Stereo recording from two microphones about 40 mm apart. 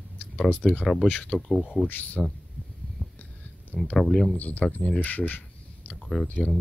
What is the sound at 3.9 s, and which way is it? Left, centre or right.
Speech, centre.